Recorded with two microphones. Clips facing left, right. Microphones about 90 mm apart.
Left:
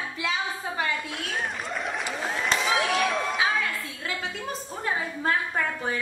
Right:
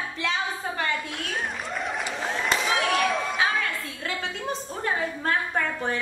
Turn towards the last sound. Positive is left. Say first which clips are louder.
# even
turn(degrees=5)  # may be behind; listen again after turning